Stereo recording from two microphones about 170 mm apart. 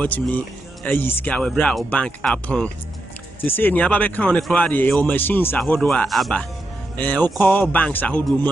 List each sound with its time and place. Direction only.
0.0 s speech: 10° left (ahead or behind)